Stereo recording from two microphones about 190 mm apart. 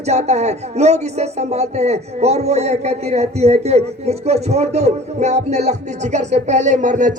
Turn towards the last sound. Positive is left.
turn(degrees=-40)  # may be behind; listen again after turning